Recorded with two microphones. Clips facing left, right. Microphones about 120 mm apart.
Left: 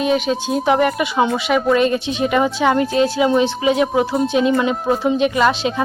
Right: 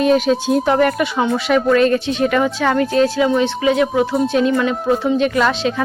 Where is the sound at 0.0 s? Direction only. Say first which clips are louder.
Right 4 dB; 5° left (ahead or behind); by 4.0 s 20° left (ahead or behind).